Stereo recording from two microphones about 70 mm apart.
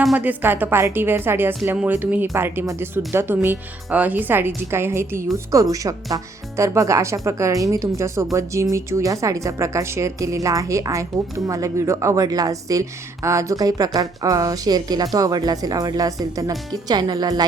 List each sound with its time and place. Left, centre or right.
0.2 s a woman's voice: right
16.9 s speech: right